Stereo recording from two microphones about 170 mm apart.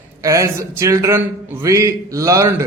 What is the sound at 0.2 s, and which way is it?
A man's voice, 20° right (ahead or behind).